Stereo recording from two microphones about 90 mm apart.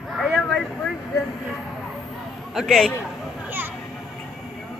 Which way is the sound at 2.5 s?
Centre (ahead or behind).